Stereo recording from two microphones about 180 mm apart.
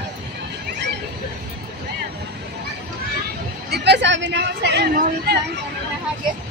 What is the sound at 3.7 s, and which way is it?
Speech, 70° right (ahead or behind).